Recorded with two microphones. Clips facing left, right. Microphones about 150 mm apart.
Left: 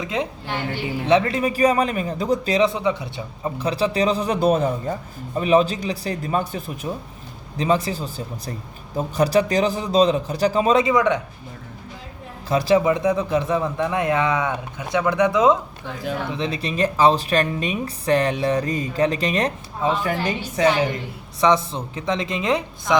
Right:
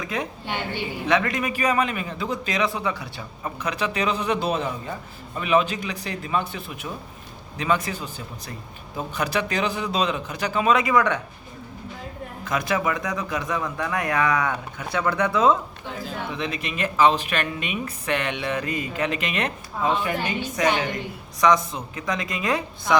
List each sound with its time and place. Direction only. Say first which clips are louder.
0.0 s a man's voice: left 3 dB; 20° left (ahead or behind)
12.5 s speech: left 7 dB; 30° left (ahead or behind)
16.4 s a man's voice: left 6 dB; 30° left (ahead or behind)